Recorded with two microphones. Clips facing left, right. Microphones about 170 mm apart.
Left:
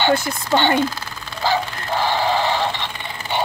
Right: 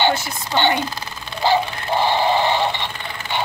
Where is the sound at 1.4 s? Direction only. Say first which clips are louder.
Right 3 dB; 20° right (ahead or behind).